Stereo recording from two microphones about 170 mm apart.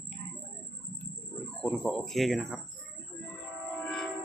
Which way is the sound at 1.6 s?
Centre (ahead or behind).